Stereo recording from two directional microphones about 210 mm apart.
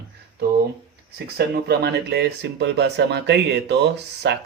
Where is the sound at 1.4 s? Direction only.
50° right (ahead or behind).